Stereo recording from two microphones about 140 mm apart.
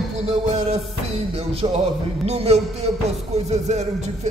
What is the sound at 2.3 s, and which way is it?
Speech, 50° right (ahead or behind).